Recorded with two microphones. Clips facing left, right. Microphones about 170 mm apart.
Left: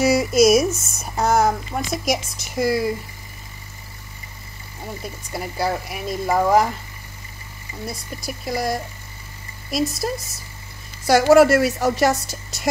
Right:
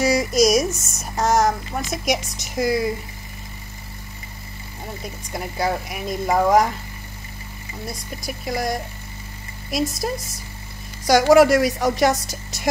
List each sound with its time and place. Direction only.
0.0 s speech: 5° left (ahead or behind)
0.8 s a sound: centre (ahead or behind)
2.0 s speech: centre (ahead or behind)
5.0 s speech: centre (ahead or behind)
7.8 s speech: centre (ahead or behind)